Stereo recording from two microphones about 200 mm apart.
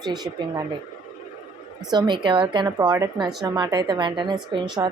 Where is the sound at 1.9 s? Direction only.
20° right (ahead or behind).